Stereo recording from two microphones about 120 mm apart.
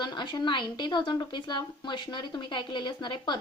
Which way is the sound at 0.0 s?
40° left (ahead or behind).